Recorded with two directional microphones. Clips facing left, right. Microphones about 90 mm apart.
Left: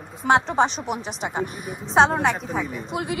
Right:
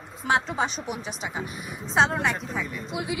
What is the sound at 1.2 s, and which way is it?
A woman's voice, 55° left (ahead or behind).